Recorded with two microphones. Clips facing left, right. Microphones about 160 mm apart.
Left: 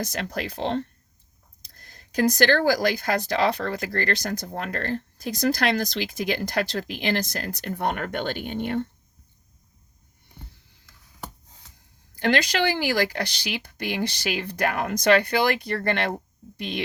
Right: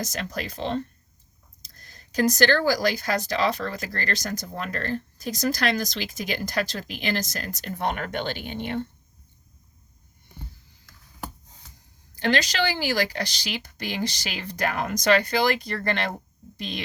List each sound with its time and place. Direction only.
0.0 s speech: 60° left (ahead or behind)
12.1 s speech: 55° left (ahead or behind)